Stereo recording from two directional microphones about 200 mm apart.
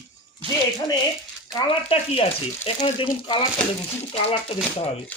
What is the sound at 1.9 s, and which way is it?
Speech, 25° left (ahead or behind).